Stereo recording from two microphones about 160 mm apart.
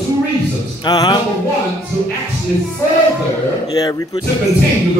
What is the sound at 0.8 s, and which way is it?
Speech, 25° left (ahead or behind).